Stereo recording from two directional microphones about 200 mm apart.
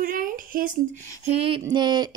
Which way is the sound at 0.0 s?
45° right (ahead or behind).